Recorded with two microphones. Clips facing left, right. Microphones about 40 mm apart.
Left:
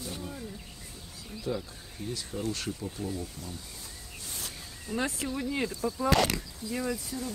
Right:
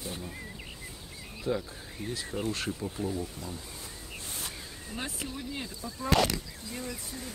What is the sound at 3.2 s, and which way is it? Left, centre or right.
Speech, right.